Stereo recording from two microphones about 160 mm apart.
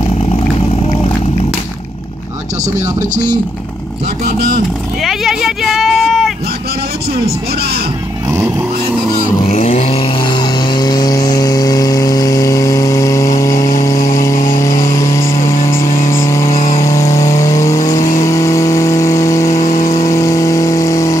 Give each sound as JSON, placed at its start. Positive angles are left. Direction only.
{"t": 5.0, "sound": "speech", "side_deg": 0}
{"t": 9.4, "sound": "vehicle", "side_deg": 45}
{"t": 10.2, "sound": "vehicle", "side_deg": 30}
{"t": 15.5, "sound": "vehicle", "side_deg": 55}
{"t": 16.1, "sound": "vehicle", "side_deg": 20}
{"t": 16.4, "sound": "vehicle", "side_deg": 50}
{"t": 16.8, "sound": "vehicle", "side_deg": 20}
{"t": 19.6, "sound": "vehicle", "side_deg": 55}
{"t": 20.0, "sound": "vehicle", "side_deg": 20}